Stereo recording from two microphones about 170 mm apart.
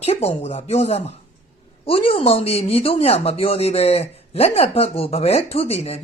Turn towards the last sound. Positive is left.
turn(degrees=35)  # may be behind; listen again after turning